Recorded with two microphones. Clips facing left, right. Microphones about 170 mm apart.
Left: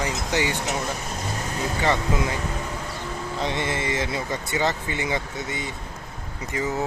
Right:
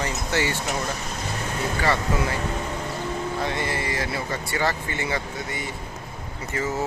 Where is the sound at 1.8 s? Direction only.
20° left (ahead or behind).